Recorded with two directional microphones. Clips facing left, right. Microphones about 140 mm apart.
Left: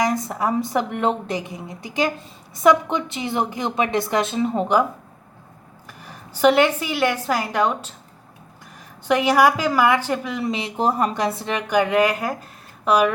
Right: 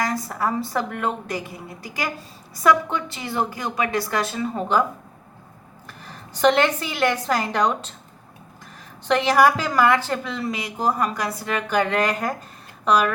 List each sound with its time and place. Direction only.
0.0 s a woman's voice: 20° left (ahead or behind)
6.1 s a woman's voice: 10° left (ahead or behind)
9.0 s a woman's voice: 10° left (ahead or behind)
10.5 s a woman's voice: 25° left (ahead or behind)